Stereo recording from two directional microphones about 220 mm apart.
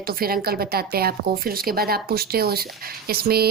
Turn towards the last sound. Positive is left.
turn(degrees=-45)  # may be behind; listen again after turning